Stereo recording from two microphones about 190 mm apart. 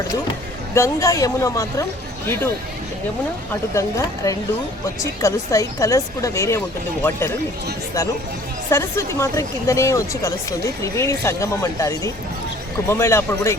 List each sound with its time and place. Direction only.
0.7 s speech: 15° left (ahead or behind)
3.8 s speech: 15° left (ahead or behind)
8.7 s speech: 15° left (ahead or behind)